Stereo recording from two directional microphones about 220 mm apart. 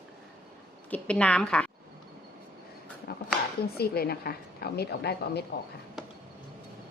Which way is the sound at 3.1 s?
45° left (ahead or behind).